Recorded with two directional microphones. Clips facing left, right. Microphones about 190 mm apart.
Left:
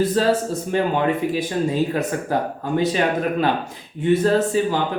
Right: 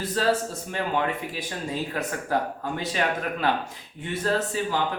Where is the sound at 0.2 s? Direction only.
20° left (ahead or behind).